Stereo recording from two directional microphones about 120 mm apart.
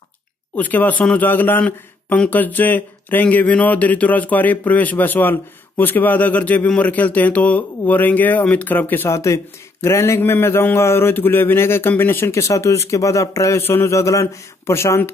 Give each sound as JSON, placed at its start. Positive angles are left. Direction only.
{"t": 0.6, "sound": "a man's voice", "side_deg": 15}